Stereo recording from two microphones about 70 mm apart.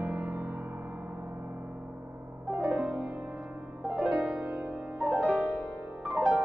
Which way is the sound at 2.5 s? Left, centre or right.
Centre.